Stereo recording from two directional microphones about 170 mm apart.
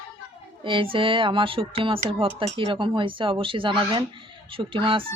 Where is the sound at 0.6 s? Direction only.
30° right (ahead or behind).